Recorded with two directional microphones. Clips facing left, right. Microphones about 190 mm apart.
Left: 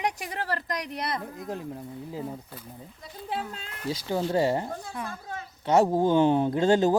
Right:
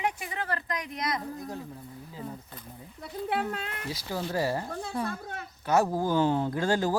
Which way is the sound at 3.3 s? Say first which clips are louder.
Right 2 dB; 65° right (ahead or behind).